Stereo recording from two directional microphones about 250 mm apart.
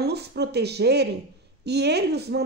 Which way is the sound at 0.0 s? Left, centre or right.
Right.